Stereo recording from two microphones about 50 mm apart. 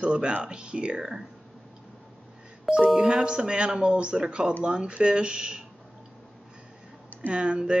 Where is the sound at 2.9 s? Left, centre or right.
Centre.